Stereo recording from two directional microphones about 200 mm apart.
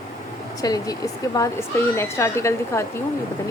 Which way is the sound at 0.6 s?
15° left (ahead or behind).